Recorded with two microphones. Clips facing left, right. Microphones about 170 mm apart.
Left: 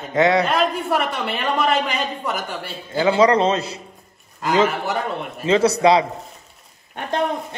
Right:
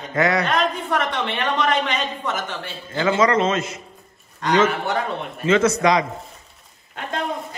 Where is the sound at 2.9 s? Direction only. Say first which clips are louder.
Left 2 dB; 10° left (ahead or behind).